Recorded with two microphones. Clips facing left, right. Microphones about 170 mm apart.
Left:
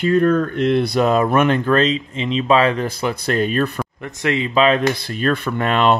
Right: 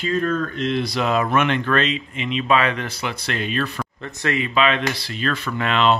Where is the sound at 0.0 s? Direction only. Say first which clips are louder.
Left 7 dB; 60° left (ahead or behind).